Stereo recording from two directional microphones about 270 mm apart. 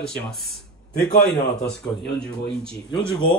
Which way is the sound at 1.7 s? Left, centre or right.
Centre.